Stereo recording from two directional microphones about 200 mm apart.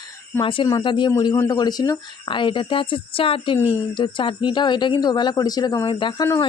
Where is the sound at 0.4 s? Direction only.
25° left (ahead or behind).